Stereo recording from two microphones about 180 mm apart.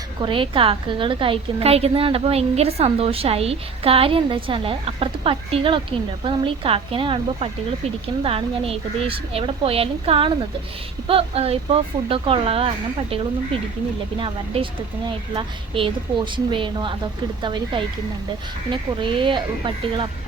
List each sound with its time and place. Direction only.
0.2 s a woman's voice: 30° right (ahead or behind)